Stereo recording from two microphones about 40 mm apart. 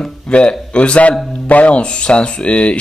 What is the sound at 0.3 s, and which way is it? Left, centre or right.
Speech, left.